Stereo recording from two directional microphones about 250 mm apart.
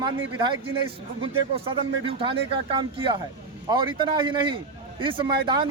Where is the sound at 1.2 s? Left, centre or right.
Right.